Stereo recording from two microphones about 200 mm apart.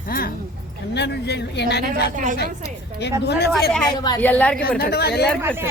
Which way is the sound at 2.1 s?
40° right (ahead or behind).